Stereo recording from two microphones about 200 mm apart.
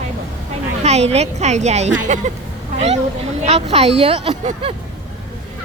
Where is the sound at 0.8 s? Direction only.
30° right (ahead or behind).